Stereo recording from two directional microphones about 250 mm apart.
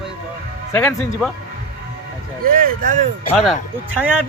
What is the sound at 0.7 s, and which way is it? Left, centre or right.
Speech, centre.